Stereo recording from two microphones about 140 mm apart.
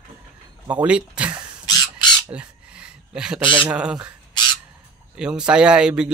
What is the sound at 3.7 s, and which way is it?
Speech, 5° right (ahead or behind).